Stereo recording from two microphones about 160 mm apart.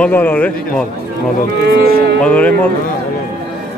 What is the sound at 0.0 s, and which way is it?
Speech, 10° left (ahead or behind).